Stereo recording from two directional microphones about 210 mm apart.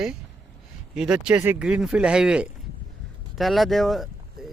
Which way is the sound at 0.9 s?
5° right (ahead or behind).